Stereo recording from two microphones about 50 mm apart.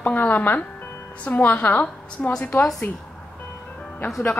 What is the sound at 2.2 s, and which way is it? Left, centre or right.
Speech, centre.